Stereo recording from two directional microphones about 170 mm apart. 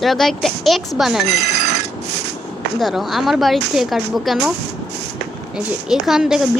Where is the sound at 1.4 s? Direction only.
70° right (ahead or behind).